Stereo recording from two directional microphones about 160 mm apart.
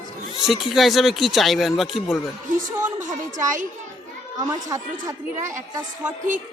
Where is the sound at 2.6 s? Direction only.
50° right (ahead or behind).